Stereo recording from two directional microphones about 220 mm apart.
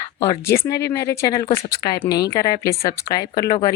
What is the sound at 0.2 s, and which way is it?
Speech, 15° left (ahead or behind).